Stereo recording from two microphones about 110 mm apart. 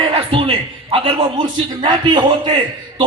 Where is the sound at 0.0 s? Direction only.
60° right (ahead or behind).